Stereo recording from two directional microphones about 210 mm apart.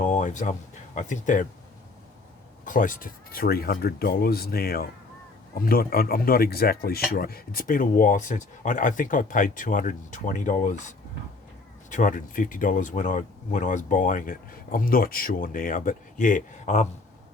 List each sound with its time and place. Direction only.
0.0 s a sound: 35° left (ahead or behind)
0.9 s speech: 35° left (ahead or behind)
2.6 s speech: 40° left (ahead or behind)
11.9 s speech: 40° left (ahead or behind)